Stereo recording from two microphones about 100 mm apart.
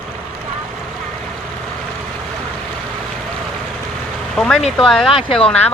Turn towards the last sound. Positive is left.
turn(degrees=70)  # may be behind; listen again after turning